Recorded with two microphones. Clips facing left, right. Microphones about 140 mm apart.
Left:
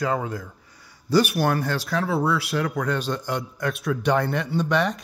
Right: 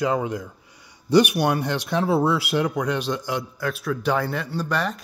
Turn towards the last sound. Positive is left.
turn(degrees=0)  # may be behind; listen again after turning